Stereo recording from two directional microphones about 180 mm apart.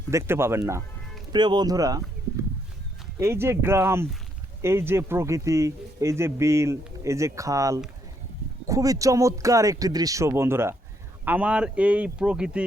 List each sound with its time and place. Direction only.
0.1 s speech: 15° right (ahead or behind)
3.2 s speech: 15° right (ahead or behind)